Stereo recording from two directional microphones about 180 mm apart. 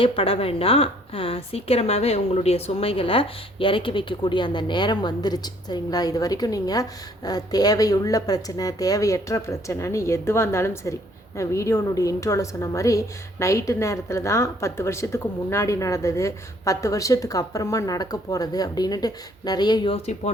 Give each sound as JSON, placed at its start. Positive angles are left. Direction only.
{"t": 0.0, "sound": "a woman's voice", "side_deg": 30}